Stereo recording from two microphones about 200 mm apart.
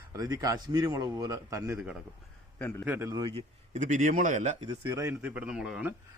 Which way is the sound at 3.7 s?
35° right (ahead or behind).